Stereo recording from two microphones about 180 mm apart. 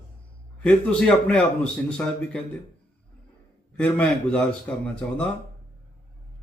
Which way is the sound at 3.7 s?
10° left (ahead or behind).